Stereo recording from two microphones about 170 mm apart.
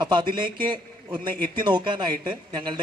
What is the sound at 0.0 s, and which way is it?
A man's voice, 25° right (ahead or behind).